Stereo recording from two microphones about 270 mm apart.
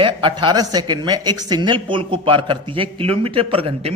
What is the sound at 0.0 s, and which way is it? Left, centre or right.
Speech, centre.